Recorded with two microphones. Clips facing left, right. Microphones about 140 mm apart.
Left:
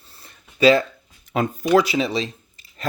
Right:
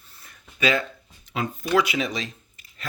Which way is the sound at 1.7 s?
40° left (ahead or behind).